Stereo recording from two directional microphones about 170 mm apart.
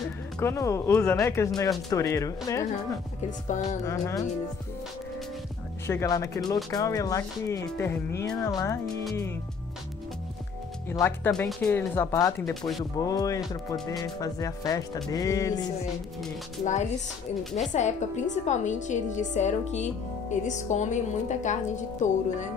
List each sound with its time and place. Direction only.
0.4 s speech: 15° left (ahead or behind)
3.8 s speech: 20° left (ahead or behind)
5.9 s speech: 20° left (ahead or behind)
10.9 s speech: 15° left (ahead or behind)
16.6 s a woman's voice: 45° left (ahead or behind)
17.4 s a woman's voice: centre (ahead or behind)
17.7 s a woman's voice: 45° left (ahead or behind)